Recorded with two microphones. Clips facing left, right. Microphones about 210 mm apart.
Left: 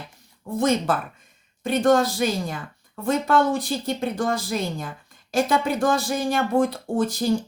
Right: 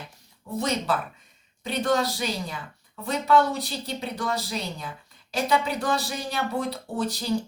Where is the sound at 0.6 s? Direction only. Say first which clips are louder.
Left 5 dB; 50° left (ahead or behind).